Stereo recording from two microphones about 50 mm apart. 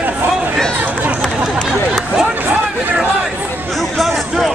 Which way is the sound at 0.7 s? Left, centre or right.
Right.